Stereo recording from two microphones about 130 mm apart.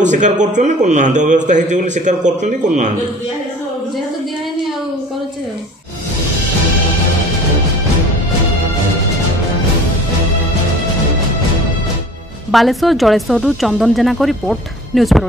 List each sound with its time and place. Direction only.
0.0 s a man's voice: 70° right (ahead or behind)
12.4 s speech: centre (ahead or behind)